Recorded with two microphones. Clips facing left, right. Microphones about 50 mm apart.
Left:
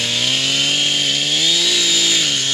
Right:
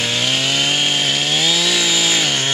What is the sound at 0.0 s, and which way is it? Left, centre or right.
Chainsaw, centre.